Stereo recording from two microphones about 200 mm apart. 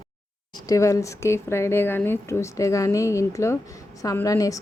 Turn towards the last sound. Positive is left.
turn(degrees=15)  # may be behind; listen again after turning